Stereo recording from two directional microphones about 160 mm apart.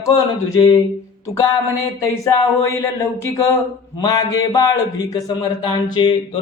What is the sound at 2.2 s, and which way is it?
A man's voice, 20° left (ahead or behind).